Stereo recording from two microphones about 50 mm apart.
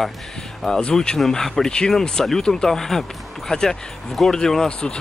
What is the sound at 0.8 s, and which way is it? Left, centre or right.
Speech, centre.